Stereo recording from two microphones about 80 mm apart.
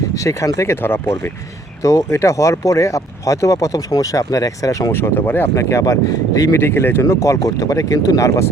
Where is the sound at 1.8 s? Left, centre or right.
Left.